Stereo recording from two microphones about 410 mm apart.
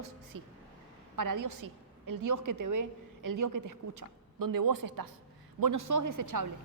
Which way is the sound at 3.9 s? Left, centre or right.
Right.